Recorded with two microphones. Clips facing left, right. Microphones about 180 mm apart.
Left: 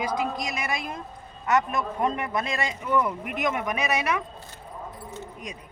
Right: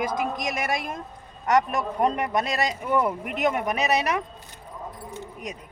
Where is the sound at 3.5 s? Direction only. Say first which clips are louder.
Right 3 dB; 40° right (ahead or behind).